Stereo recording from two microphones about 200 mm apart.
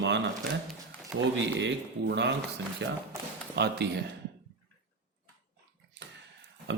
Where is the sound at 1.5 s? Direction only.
60° right (ahead or behind).